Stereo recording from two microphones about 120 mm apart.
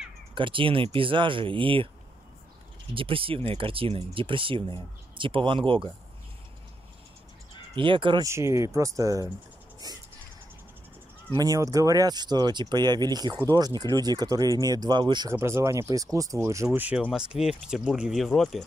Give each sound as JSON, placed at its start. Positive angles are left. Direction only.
{"t": 0.3, "sound": "speech", "side_deg": -45}
{"t": 2.9, "sound": "speech", "side_deg": -50}
{"t": 7.7, "sound": "speech", "side_deg": -45}
{"t": 8.2, "sound": "speech", "side_deg": -25}
{"t": 9.8, "sound": "a sound", "side_deg": -30}
{"t": 11.3, "sound": "speech", "side_deg": -30}
{"t": 15.2, "sound": "speech", "side_deg": -25}
{"t": 16.7, "sound": "speech", "side_deg": -15}